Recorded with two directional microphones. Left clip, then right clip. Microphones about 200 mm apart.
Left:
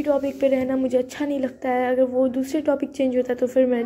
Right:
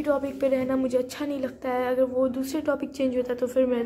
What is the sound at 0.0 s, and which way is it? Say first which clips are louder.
Speech: left 4 dB; 10° left (ahead or behind).